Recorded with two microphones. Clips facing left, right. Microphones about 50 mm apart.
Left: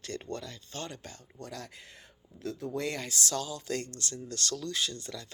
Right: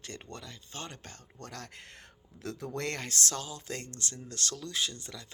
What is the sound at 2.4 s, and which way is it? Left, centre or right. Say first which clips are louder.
Speech: left 2 dB; right.